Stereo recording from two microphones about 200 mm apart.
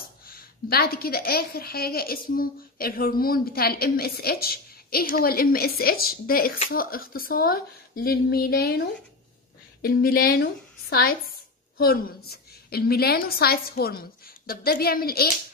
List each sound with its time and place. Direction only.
0.3 s a woman's voice: 50° left (ahead or behind)